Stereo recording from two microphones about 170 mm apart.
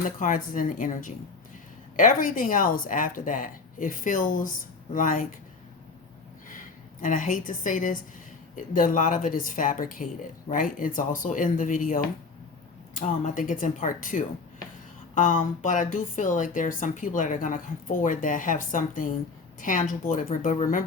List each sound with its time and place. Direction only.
0.0 s speech: 50° left (ahead or behind)
7.0 s speech: 50° left (ahead or behind)